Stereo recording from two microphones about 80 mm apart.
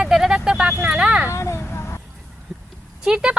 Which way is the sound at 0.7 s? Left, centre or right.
Centre.